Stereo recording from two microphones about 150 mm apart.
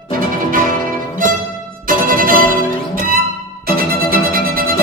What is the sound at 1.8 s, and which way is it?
Music, 65° right (ahead or behind).